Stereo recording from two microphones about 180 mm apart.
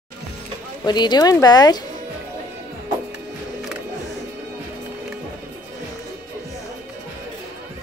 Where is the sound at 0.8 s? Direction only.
25° left (ahead or behind).